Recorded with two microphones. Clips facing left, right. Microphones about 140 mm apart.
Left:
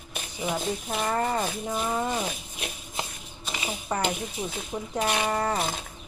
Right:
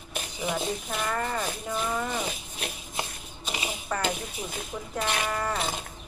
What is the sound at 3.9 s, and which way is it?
Speech, 20° left (ahead or behind).